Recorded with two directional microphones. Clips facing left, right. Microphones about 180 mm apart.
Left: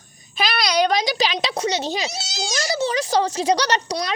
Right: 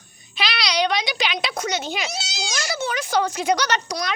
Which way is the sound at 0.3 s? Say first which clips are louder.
Left 4 dB; 45° left (ahead or behind).